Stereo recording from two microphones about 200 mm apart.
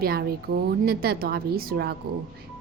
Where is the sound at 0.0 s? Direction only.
50° right (ahead or behind).